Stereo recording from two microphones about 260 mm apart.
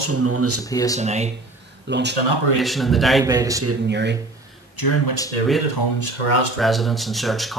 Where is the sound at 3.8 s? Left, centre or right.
Right.